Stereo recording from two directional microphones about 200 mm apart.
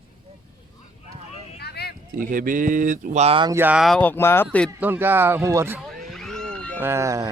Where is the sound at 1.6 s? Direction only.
55° left (ahead or behind).